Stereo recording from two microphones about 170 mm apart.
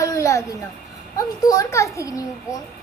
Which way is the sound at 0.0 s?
20° left (ahead or behind).